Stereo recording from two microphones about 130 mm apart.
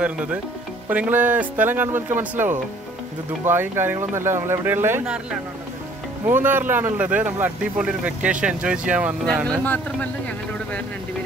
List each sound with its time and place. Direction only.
0.0 s speech: 10° right (ahead or behind)
5.0 s speech: 5° right (ahead or behind)
9.2 s speech: centre (ahead or behind)